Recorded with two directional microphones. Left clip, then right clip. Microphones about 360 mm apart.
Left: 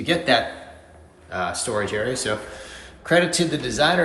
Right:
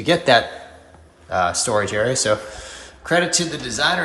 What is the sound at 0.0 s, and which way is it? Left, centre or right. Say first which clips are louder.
Speech: right 4 dB; centre.